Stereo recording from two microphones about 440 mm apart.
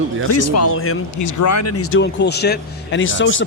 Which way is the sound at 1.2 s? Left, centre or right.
Left.